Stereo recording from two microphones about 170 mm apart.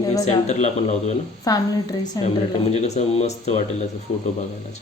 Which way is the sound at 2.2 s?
40° left (ahead or behind).